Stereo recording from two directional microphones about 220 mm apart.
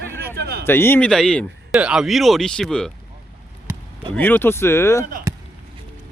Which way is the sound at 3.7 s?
10° right (ahead or behind).